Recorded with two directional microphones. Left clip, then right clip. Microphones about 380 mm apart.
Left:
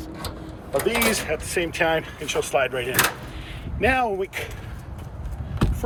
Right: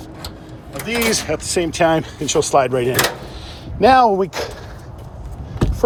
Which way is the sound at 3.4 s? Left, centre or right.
Right.